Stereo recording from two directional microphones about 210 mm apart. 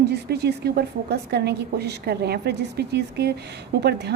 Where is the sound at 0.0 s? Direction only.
50° right (ahead or behind).